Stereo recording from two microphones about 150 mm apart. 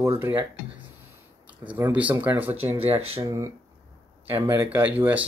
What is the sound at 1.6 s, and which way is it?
Speech, 10° right (ahead or behind).